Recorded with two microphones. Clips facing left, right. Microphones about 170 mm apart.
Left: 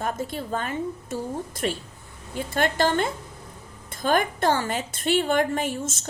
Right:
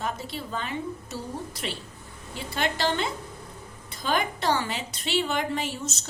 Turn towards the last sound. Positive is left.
turn(degrees=50)  # may be behind; listen again after turning